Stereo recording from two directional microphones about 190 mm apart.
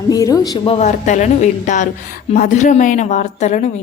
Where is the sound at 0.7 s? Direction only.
40° left (ahead or behind).